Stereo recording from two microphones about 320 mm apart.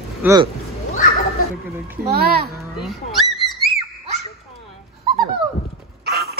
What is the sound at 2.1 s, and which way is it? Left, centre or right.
Speech, right.